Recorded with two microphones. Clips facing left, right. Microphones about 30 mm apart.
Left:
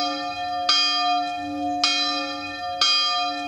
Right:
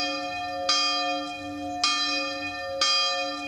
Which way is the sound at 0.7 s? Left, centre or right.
Left.